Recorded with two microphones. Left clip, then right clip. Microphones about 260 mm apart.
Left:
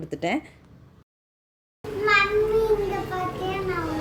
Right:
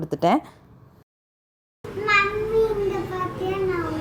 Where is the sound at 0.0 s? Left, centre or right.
Right.